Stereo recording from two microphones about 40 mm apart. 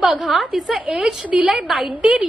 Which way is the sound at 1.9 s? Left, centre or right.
Right.